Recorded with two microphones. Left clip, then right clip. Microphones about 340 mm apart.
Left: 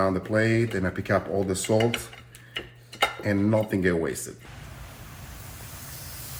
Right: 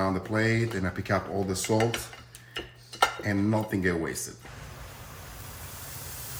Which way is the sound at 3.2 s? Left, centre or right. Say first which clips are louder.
Left 4 dB; centre.